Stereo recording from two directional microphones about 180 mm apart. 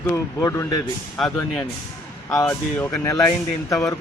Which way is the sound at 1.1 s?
5° left (ahead or behind).